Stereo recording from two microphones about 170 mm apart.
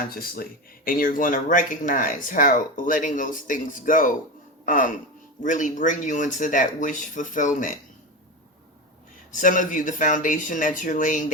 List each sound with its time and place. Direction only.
0.1 s speech: 60° left (ahead or behind)
9.3 s speech: 50° left (ahead or behind)